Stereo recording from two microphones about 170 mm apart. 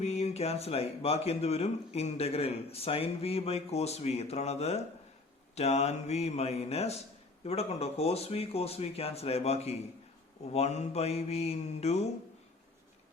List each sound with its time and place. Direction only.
0.0 s speech: 40° left (ahead or behind)